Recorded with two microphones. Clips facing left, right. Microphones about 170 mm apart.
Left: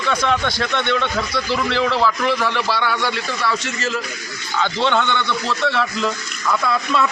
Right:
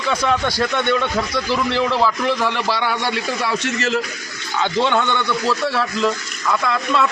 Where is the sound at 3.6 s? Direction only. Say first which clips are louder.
Right 4 dB; 70° right (ahead or behind).